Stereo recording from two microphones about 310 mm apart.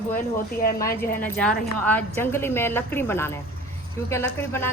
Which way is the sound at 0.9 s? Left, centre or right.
Left.